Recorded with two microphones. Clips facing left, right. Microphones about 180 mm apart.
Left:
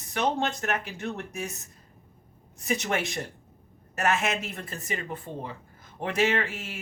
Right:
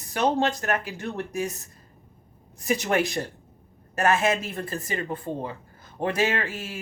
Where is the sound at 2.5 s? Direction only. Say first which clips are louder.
Right 5 dB; 35° right (ahead or behind).